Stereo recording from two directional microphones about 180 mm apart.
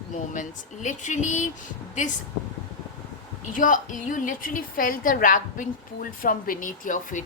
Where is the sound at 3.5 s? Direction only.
45° left (ahead or behind).